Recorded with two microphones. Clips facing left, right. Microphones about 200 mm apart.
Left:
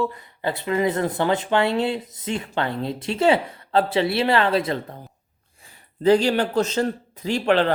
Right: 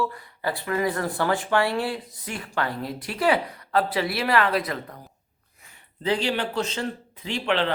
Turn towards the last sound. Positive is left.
turn(degrees=45)  # may be behind; listen again after turning